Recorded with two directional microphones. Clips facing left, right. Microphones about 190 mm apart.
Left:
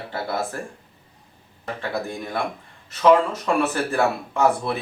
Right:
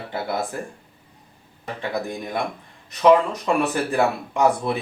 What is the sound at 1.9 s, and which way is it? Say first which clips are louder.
Speech: right 1 dB; 15° right (ahead or behind).